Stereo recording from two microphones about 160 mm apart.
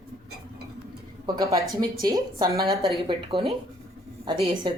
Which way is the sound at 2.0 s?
25° right (ahead or behind).